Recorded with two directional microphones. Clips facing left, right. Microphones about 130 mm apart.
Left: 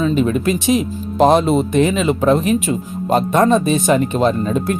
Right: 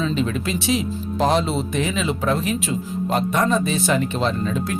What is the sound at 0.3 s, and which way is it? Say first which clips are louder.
Music: left 6 dB; 50° left (ahead or behind).